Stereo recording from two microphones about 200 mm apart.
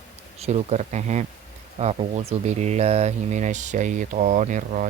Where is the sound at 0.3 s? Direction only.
30° right (ahead or behind).